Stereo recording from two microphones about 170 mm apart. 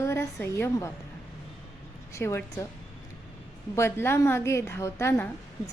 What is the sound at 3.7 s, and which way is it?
A woman's voice, 15° left (ahead or behind).